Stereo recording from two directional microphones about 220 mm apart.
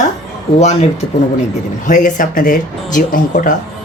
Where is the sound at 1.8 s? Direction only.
35° left (ahead or behind).